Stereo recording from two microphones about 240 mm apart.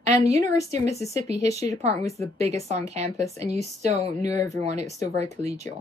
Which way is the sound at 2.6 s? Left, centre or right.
Right.